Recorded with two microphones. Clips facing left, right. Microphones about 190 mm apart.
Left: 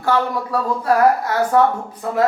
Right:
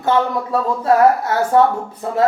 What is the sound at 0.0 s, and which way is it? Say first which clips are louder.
Speech: right 2 dB; 25° right (ahead or behind).